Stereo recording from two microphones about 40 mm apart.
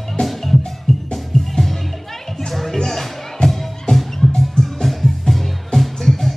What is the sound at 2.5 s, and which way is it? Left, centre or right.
Music, centre.